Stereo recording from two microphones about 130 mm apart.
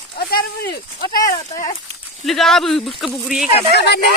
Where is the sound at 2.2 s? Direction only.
Centre (ahead or behind).